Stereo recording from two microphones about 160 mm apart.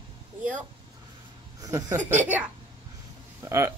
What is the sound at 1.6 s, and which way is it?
Speech, 20° right (ahead or behind).